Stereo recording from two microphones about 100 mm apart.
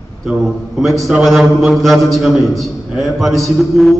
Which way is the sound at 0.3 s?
Centre (ahead or behind).